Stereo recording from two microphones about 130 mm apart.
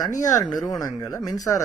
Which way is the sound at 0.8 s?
25° left (ahead or behind).